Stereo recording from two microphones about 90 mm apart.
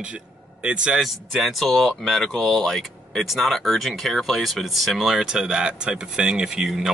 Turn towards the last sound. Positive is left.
turn(degrees=-5)  # may be behind; listen again after turning